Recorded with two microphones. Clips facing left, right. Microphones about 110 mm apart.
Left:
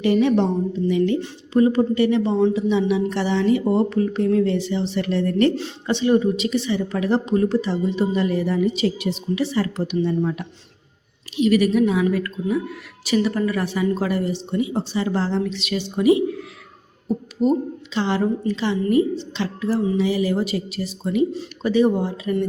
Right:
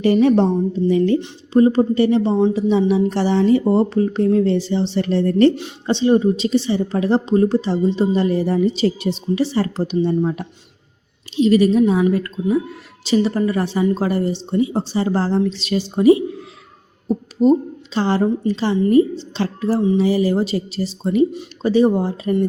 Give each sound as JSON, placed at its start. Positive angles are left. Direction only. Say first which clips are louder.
{"t": 0.0, "sound": "a woman's voice", "louder": "right 4 dB", "side_deg": -40}
{"t": 11.3, "sound": "a woman's voice", "louder": "right 3 dB", "side_deg": -30}